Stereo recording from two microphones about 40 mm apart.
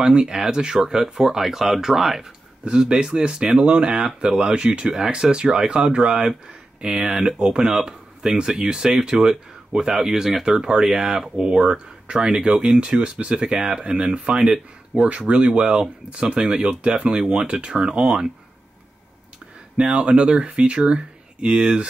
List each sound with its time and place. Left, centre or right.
0.0 s speech: centre
2.6 s speech: centre
19.9 s speech: right